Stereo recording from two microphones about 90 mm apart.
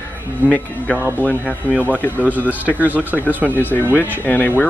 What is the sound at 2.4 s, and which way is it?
Speech, 20° left (ahead or behind).